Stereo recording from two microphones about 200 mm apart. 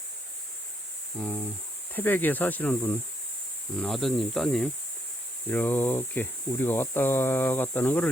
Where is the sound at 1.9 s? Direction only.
10° left (ahead or behind).